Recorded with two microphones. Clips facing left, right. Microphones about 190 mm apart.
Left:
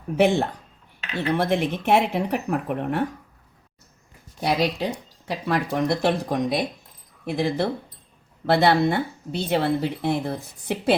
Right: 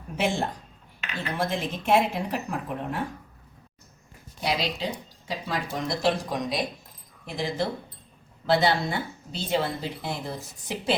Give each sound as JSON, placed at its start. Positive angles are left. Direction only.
{"t": 0.2, "sound": "speech", "side_deg": 60}
{"t": 4.4, "sound": "speech", "side_deg": 55}